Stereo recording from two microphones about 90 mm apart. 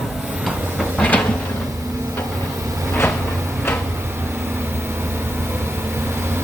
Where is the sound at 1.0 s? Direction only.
15° left (ahead or behind).